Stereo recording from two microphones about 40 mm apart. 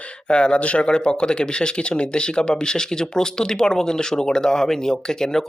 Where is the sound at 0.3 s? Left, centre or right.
Left.